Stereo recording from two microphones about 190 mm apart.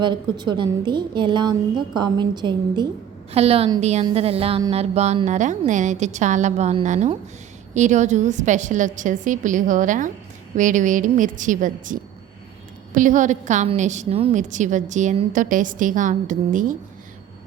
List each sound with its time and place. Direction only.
0.0 s a woman's voice: 25° right (ahead or behind); by 16.7 s 45° right (ahead or behind)